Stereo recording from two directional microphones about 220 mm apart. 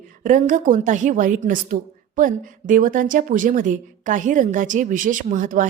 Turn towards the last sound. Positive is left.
turn(degrees=-35)  # may be behind; listen again after turning